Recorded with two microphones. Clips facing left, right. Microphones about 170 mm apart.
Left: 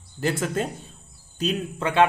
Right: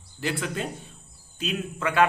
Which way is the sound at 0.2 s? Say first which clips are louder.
Left 4 dB; 45° left (ahead or behind).